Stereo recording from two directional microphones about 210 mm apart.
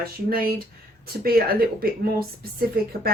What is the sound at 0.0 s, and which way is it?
A woman's voice, 45° right (ahead or behind).